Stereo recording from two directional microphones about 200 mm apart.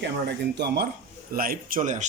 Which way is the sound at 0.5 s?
55° right (ahead or behind).